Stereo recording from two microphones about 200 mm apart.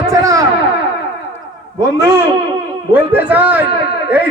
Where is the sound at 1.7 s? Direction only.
15° right (ahead or behind).